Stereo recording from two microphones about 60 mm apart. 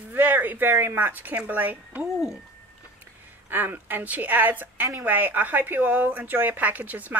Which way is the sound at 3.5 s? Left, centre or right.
Right.